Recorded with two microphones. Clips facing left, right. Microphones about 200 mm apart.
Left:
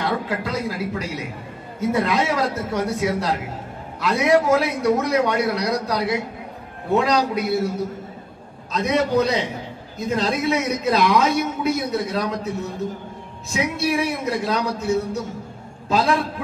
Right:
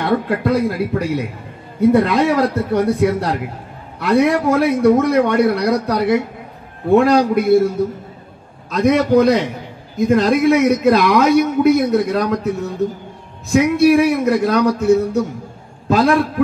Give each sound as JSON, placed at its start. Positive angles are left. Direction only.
{"t": 0.0, "sound": "a man's voice", "side_deg": -55}